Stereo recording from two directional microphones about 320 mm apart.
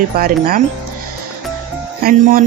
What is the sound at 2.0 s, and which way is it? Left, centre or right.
Speech, right.